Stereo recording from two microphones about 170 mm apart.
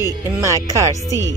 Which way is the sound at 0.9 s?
20° left (ahead or behind).